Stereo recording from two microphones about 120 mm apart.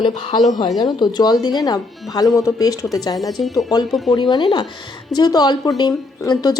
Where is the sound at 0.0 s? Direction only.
40° left (ahead or behind).